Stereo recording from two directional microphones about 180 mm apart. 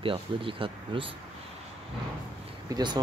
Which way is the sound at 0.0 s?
30° right (ahead or behind).